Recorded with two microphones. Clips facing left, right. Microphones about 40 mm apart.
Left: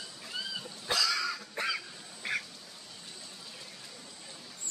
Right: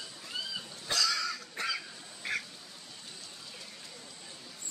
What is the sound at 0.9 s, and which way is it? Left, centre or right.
Duck, centre.